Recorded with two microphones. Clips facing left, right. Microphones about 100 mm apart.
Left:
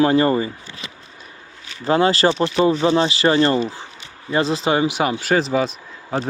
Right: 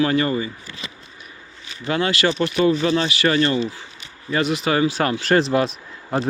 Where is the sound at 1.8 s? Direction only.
30° left (ahead or behind); by 6.3 s centre (ahead or behind).